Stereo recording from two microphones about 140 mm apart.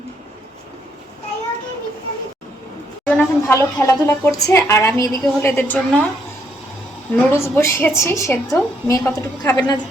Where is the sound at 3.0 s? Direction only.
10° left (ahead or behind).